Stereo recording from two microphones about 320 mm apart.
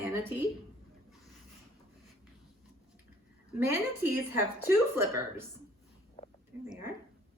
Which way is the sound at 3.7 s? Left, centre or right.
Centre.